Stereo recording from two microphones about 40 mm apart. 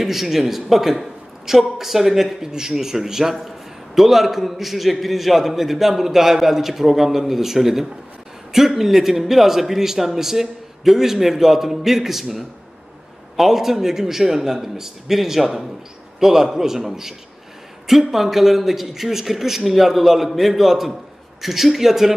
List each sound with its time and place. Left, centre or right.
0.0 s a man's voice: centre